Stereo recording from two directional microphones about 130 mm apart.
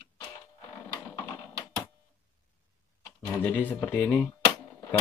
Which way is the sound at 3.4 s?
15° left (ahead or behind).